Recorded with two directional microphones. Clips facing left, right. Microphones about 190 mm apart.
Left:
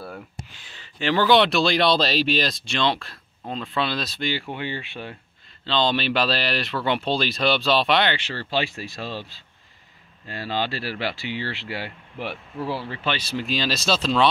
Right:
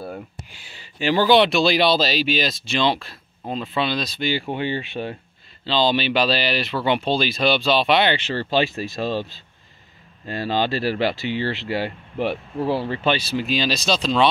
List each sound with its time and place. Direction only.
0.5 s speech: 10° right (ahead or behind)
4.3 s speech: 20° right (ahead or behind)
5.7 s speech: 5° right (ahead or behind)
8.1 s speech: 20° right (ahead or behind)
10.2 s speech: 35° right (ahead or behind)
10.7 s speech: 20° right (ahead or behind)
13.0 s speech: 10° right (ahead or behind)